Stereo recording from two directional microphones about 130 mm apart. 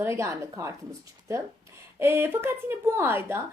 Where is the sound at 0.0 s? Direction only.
20° right (ahead or behind).